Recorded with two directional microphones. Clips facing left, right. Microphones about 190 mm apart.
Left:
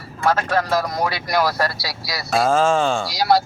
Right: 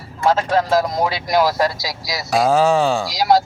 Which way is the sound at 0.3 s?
15° right (ahead or behind).